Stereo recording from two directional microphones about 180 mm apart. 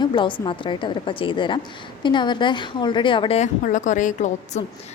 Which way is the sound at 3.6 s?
45° left (ahead or behind).